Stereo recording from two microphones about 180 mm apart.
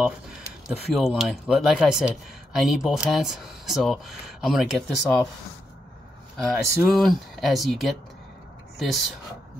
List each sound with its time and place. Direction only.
0.7 s speech: centre (ahead or behind)
6.3 s speech: centre (ahead or behind)